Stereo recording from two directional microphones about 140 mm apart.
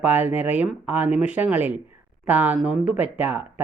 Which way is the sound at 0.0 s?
15° right (ahead or behind).